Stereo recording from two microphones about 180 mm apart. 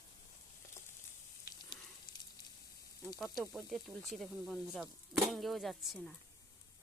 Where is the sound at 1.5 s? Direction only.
20° left (ahead or behind).